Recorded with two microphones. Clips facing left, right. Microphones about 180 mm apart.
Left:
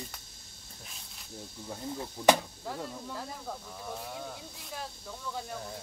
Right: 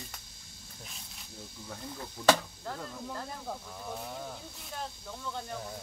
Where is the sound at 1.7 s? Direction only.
20° left (ahead or behind).